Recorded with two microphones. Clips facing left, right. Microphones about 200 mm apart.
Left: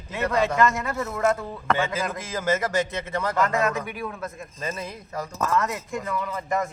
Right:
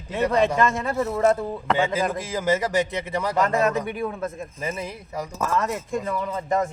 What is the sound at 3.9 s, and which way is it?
Speech, 30° right (ahead or behind).